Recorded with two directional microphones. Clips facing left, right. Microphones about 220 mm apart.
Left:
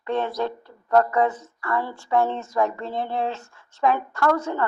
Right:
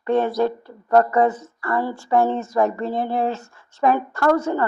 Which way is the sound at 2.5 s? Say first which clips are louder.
Right 4 dB; 5° right (ahead or behind).